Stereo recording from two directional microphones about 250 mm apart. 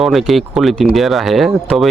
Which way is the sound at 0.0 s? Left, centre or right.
Centre.